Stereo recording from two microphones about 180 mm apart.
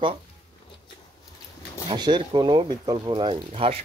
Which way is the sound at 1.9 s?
25° right (ahead or behind).